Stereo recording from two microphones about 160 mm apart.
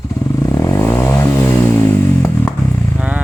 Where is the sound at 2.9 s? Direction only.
10° right (ahead or behind).